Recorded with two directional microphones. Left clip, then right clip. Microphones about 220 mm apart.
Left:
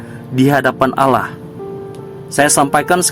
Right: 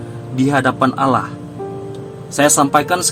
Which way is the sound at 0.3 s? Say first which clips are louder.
Left 3 dB; 35° left (ahead or behind).